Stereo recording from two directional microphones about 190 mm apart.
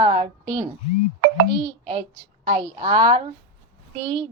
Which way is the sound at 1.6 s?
25° right (ahead or behind).